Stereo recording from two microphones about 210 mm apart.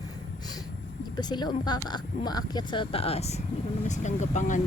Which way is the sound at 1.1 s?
20° left (ahead or behind).